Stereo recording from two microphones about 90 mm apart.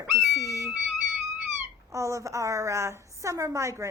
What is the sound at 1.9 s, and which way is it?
Speech, 35° right (ahead or behind).